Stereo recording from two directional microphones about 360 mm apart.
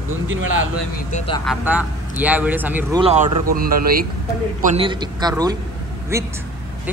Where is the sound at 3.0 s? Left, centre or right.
Centre.